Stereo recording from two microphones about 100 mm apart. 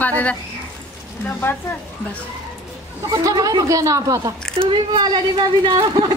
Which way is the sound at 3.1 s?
40° right (ahead or behind).